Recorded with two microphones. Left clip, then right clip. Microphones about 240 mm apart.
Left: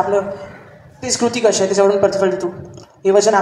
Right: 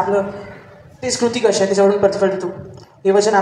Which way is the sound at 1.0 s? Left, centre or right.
Left.